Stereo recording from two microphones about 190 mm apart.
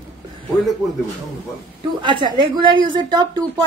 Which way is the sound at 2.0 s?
25° right (ahead or behind).